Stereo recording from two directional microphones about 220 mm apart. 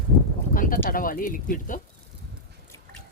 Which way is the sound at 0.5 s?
40° left (ahead or behind).